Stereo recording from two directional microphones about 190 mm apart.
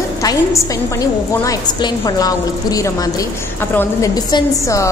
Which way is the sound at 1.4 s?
20° left (ahead or behind).